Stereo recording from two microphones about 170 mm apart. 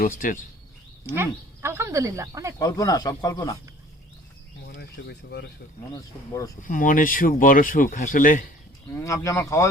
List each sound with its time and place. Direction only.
0.0 s speech: 55° left (ahead or behind)
1.0 s speech: 15° right (ahead or behind)
2.6 s speech: 20° left (ahead or behind)
4.8 s speech: 70° left (ahead or behind)
5.9 s speech: 20° left (ahead or behind)
6.6 s speech: 50° left (ahead or behind)
8.9 s speech: 15° left (ahead or behind)